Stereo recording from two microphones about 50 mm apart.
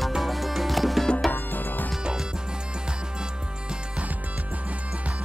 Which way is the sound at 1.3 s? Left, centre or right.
Left.